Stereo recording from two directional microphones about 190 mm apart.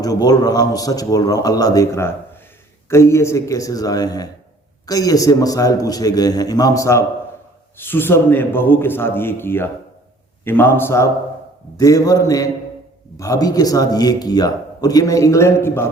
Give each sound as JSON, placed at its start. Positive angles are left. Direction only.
{"t": 0.0, "sound": "a man's voice", "side_deg": 20}